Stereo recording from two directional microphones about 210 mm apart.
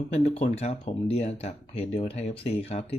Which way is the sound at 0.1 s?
30° left (ahead or behind).